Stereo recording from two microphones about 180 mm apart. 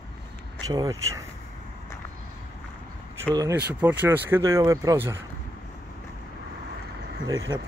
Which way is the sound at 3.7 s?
10° right (ahead or behind).